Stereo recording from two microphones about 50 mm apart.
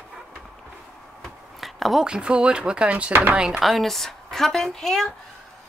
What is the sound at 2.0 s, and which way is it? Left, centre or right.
Speech, centre.